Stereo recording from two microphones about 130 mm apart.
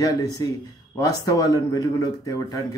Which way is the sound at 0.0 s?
25° left (ahead or behind).